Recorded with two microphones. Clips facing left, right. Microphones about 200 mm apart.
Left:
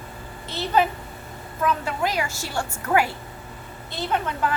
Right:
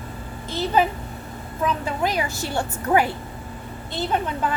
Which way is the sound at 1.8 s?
20° right (ahead or behind).